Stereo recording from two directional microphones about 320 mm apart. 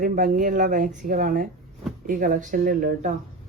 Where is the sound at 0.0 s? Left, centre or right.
Right.